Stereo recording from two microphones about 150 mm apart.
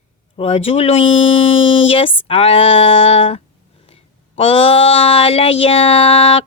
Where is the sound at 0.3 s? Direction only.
40° left (ahead or behind).